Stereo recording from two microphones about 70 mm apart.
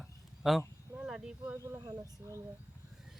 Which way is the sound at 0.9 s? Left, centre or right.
Centre.